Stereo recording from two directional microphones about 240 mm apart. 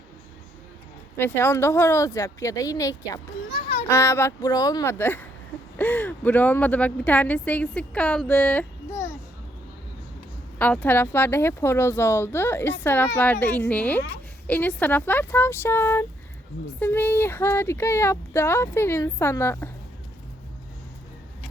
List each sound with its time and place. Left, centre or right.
1.1 s speech: centre
10.6 s speech: centre